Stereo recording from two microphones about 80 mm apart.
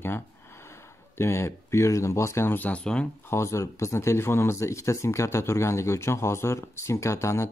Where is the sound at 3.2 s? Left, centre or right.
Left.